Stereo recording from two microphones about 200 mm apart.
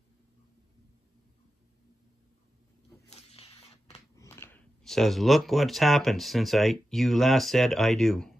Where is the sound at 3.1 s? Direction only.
30° left (ahead or behind).